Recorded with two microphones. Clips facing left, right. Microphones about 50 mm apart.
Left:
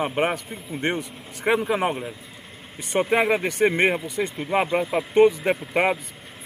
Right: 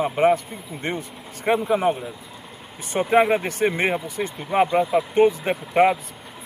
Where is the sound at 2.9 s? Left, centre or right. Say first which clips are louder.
Right 2 dB; left.